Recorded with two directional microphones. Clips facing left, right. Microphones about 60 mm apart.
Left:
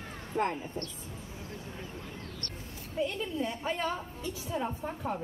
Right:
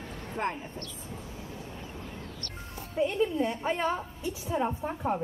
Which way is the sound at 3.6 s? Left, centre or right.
Centre.